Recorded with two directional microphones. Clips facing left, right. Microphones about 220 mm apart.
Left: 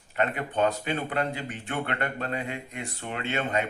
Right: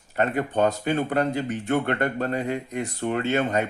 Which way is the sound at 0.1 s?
40° right (ahead or behind).